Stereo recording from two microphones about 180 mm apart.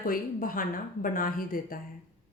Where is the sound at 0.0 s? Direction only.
50° left (ahead or behind).